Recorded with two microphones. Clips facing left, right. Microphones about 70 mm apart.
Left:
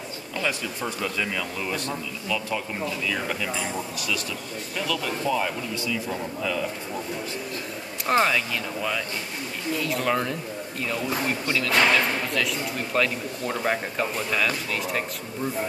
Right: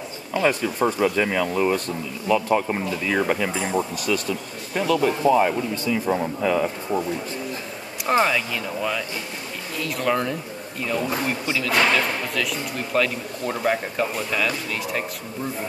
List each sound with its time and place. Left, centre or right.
0.4 s speech: right
8.1 s speech: centre
9.8 s speech: centre
11.9 s speech: centre